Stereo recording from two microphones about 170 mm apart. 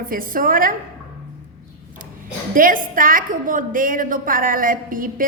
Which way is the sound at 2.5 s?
55° right (ahead or behind).